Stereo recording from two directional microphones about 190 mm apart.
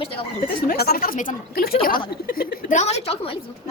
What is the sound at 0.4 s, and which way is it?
Speech, 55° left (ahead or behind).